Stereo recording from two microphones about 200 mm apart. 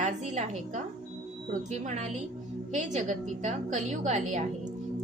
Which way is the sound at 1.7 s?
35° right (ahead or behind).